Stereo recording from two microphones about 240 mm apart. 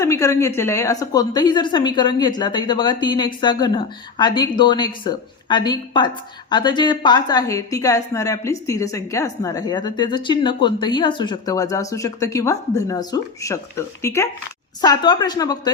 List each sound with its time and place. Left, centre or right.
0.0 s a woman's voice: centre